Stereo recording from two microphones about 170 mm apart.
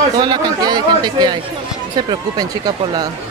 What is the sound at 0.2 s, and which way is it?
Speech, 25° right (ahead or behind).